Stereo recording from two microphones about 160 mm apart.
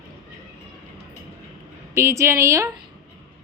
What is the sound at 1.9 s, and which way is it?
Speech, 15° right (ahead or behind).